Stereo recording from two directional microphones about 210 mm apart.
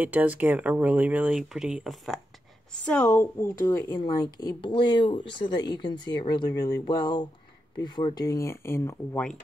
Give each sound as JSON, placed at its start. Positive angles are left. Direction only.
{"t": 0.0, "sound": "a woman's voice", "side_deg": -10}